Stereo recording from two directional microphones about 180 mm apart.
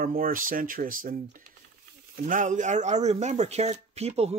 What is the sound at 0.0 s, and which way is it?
Speech, 50° right (ahead or behind).